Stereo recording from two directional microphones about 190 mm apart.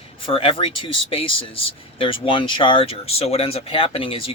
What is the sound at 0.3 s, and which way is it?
Speech, 30° left (ahead or behind).